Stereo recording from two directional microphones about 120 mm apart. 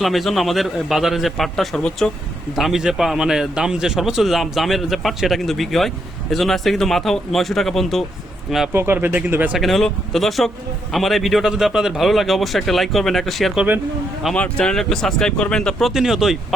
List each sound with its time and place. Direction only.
0.0 s a man's voice: centre (ahead or behind)
8.7 s speech: 20° right (ahead or behind)
9.6 s a man's voice: centre (ahead or behind)
15.9 s a man's voice: 5° right (ahead or behind)